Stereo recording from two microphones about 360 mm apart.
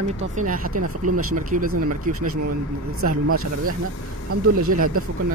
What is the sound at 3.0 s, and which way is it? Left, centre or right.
Speech, right.